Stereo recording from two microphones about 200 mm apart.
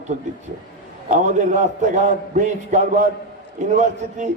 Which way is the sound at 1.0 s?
35° right (ahead or behind).